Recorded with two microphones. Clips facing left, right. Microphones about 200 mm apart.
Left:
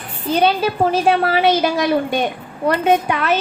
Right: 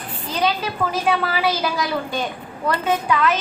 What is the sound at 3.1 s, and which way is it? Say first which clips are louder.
Speech: left 1 dB; 25° left (ahead or behind).